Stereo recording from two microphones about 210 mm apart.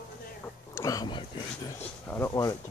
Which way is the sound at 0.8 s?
15° left (ahead or behind).